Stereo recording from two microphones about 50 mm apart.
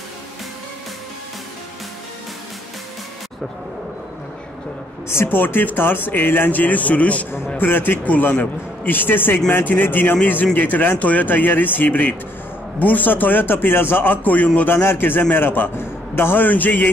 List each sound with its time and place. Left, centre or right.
5.0 s speech: left
7.5 s speech: left
8.0 s speech: left
14.8 s a man's voice: left
16.4 s speech: left